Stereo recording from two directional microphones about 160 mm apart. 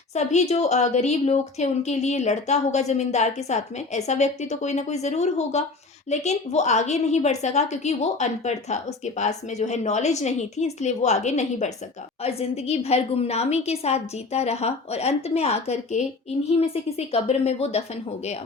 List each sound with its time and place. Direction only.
0.1 s a woman's voice: 45° left (ahead or behind)
17.1 s a woman's voice: 40° left (ahead or behind)